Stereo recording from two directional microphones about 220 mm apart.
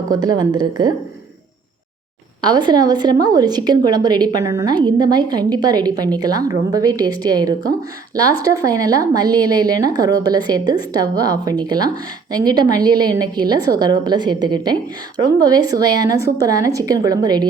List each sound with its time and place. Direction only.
0.1 s a woman's voice: 20° right (ahead or behind)
2.4 s a woman's voice: 20° right (ahead or behind)